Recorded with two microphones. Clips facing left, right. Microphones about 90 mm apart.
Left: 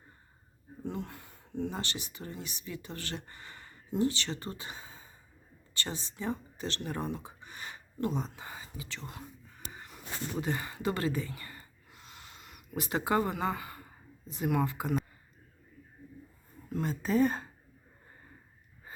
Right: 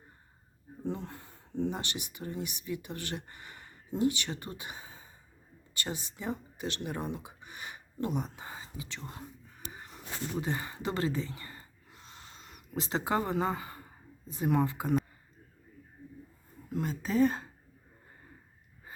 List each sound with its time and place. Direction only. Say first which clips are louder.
0.9 s speech: right 1 dB; 25° right (ahead or behind)
1.7 s speech: even; 20° right (ahead or behind)
9.7 s a sound: right 1 dB; 25° right (ahead or behind)
10.4 s speech: left 2 dB; 20° right (ahead or behind)
11.9 s a sound: even; 35° right (ahead or behind)
14.3 s speech: right 2 dB; 25° right (ahead or behind)
16.8 s speech: even; centre (ahead or behind)